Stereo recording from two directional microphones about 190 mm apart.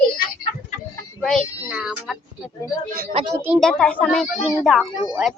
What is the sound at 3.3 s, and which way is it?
Speech, 10° right (ahead or behind).